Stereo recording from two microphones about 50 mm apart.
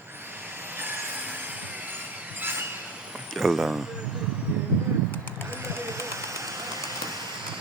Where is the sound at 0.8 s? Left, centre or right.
Right.